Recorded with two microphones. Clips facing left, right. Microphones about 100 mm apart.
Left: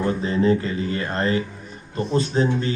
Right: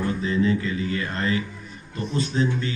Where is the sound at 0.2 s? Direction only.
40° left (ahead or behind).